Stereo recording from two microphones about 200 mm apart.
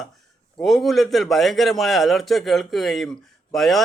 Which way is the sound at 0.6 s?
Centre (ahead or behind).